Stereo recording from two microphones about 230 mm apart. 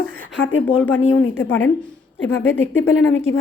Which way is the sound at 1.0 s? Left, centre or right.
Left.